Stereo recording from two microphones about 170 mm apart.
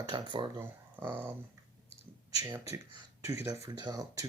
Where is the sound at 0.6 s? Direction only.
15° right (ahead or behind).